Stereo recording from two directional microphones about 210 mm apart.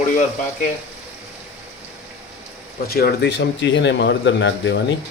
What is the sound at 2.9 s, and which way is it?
Speech, 50° left (ahead or behind).